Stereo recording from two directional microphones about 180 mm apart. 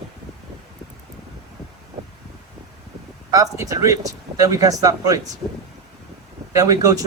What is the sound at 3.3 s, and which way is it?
A man's voice, 20° right (ahead or behind).